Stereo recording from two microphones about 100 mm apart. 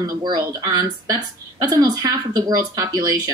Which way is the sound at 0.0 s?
40° right (ahead or behind).